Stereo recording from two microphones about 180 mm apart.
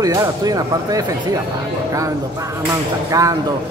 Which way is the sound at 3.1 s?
20° right (ahead or behind).